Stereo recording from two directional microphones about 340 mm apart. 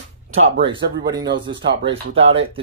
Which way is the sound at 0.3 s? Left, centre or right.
Right.